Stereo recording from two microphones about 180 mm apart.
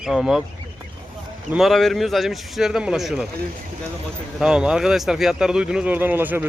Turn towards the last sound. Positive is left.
turn(degrees=-10)  # may be behind; listen again after turning